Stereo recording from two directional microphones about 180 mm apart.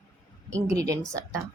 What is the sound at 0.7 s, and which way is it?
Speech, 20° right (ahead or behind).